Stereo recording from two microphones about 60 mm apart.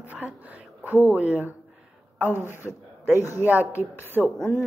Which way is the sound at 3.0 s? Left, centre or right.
Right.